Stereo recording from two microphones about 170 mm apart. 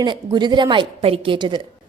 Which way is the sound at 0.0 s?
25° right (ahead or behind).